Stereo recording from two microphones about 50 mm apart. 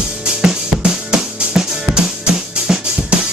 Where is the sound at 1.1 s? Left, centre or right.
Centre.